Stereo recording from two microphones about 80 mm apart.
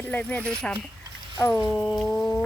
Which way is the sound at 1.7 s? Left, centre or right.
Centre.